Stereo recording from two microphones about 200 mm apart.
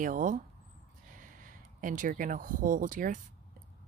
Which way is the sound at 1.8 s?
40° right (ahead or behind).